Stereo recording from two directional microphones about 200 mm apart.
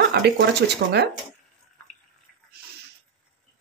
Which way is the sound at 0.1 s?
55° right (ahead or behind).